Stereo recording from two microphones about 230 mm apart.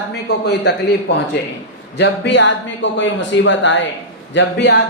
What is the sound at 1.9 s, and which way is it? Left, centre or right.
A man's voice, left.